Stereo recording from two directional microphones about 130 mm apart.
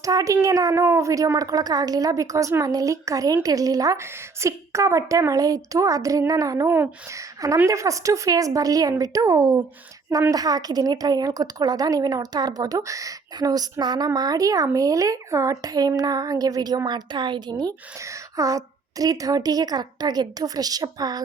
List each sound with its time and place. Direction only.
0.0 s a woman's voice: 25° right (ahead or behind)
18.0 s a woman's voice: 25° right (ahead or behind)